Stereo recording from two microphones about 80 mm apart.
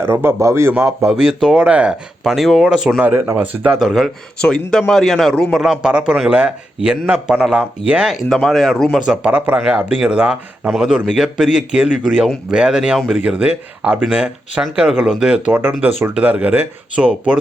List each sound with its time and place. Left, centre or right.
0.0 s a man's voice: right
0.7 s speech: centre
1.6 s speech: centre
3.0 s speech: right
3.8 s speech: centre
4.4 s speech: centre
9.0 s speech: centre